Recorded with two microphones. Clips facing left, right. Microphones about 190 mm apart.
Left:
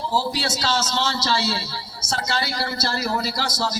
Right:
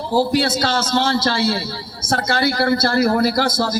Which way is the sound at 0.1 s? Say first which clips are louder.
Right 10 dB; 55° right (ahead or behind).